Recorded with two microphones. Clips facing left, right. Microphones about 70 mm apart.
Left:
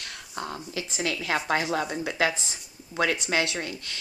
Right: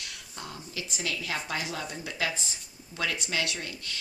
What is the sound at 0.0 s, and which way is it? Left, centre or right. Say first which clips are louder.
Whispering: left 6 dB; left.